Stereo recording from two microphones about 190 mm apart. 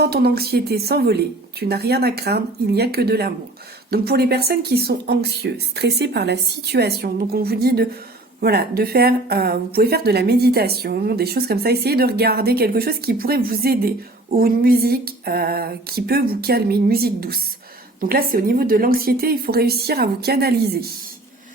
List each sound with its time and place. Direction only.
0.0 s speech: 55° right (ahead or behind)